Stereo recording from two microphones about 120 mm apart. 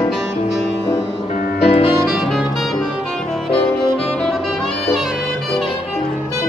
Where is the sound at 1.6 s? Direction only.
50° left (ahead or behind).